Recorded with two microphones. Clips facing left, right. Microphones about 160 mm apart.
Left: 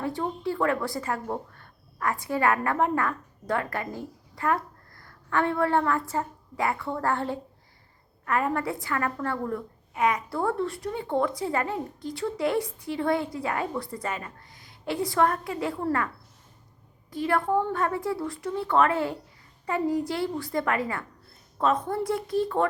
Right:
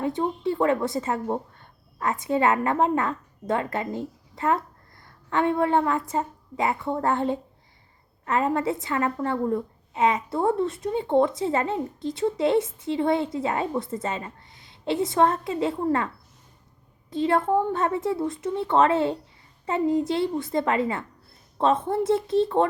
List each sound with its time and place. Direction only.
0.0 s a woman's voice: 20° right (ahead or behind)
17.1 s a woman's voice: 25° right (ahead or behind)